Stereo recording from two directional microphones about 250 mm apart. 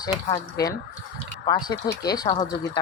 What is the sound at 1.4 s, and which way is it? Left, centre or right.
Speech, centre.